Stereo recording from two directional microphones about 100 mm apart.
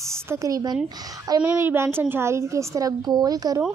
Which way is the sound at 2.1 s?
25° right (ahead or behind).